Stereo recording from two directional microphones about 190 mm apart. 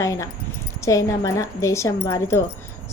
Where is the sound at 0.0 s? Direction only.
15° left (ahead or behind).